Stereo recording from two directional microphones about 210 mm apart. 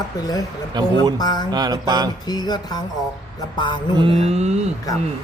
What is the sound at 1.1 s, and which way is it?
Speech, 20° left (ahead or behind).